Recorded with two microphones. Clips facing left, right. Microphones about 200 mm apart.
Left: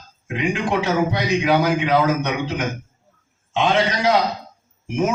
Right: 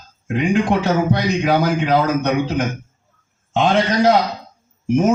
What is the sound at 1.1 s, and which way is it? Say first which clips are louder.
A man's voice: right 2 dB; 50° right (ahead or behind).